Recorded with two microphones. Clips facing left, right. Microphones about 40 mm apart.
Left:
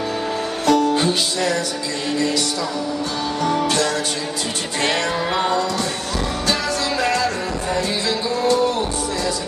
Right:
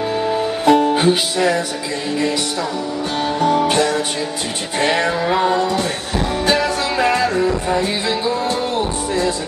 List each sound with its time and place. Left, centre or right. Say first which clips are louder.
0.7 s music: right 3 dB; right
3.3 s music: right 4 dB; right
6.4 s music: right 5 dB; right